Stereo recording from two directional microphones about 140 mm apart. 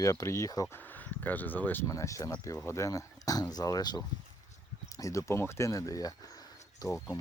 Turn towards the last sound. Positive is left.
turn(degrees=25)  # may be behind; listen again after turning